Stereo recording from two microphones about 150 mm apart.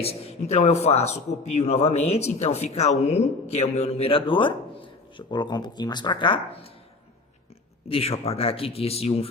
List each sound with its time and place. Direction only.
0.0 s a man's voice: 40° left (ahead or behind)
7.9 s speech: 40° left (ahead or behind)